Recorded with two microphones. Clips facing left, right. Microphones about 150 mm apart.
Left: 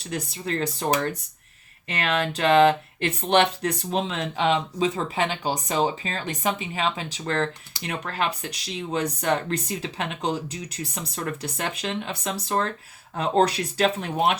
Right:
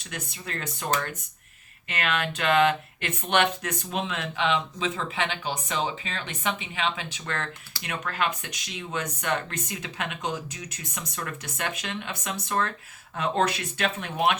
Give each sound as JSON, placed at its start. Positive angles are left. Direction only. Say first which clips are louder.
{"t": 0.1, "sound": "speech", "louder": "left 8 dB", "side_deg": 30}
{"t": 1.9, "sound": "speech", "louder": "left 3 dB", "side_deg": 35}